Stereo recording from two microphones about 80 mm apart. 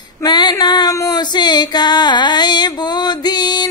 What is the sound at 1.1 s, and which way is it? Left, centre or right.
Music, left.